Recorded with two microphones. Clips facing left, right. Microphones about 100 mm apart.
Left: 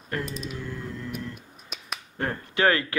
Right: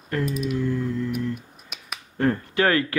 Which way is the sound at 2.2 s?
20° left (ahead or behind).